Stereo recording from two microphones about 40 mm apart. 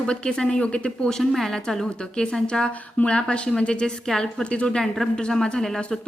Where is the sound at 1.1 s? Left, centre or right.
Centre; by 4.8 s left.